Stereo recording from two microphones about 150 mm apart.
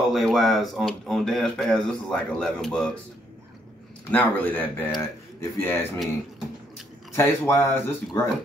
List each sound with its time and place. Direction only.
0.0 s speech: centre (ahead or behind)
4.1 s speech: 10° left (ahead or behind)
7.2 s speech: 20° left (ahead or behind)